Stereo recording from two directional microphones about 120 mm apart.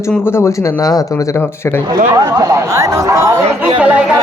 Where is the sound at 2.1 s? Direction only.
25° right (ahead or behind).